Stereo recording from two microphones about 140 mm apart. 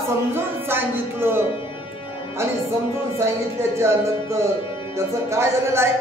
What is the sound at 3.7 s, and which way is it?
A woman's voice, 20° right (ahead or behind).